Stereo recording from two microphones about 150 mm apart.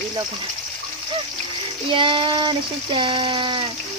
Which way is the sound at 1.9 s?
35° right (ahead or behind).